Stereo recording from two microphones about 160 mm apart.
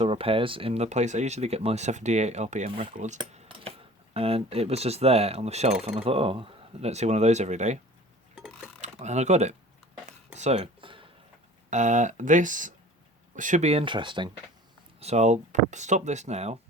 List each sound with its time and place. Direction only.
0.0 s speech: 35° right (ahead or behind)
8.4 s a sound: 5° right (ahead or behind)
8.8 s speech: 45° right (ahead or behind)
10.3 s a sound: 45° right (ahead or behind)
11.7 s speech: 50° right (ahead or behind); by 14.3 s 30° right (ahead or behind)
15.0 s speech: 45° right (ahead or behind)